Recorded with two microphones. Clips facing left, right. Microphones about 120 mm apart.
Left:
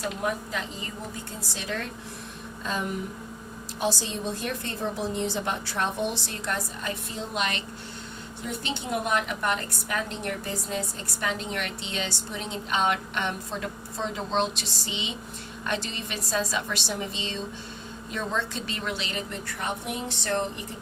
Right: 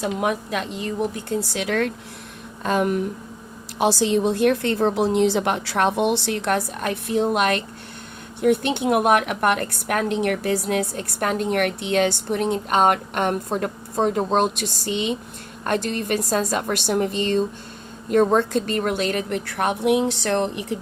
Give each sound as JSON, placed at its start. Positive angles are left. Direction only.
{"t": 0.0, "sound": "a woman's voice", "side_deg": -85}
{"t": 2.6, "sound": "a woman's voice", "side_deg": -65}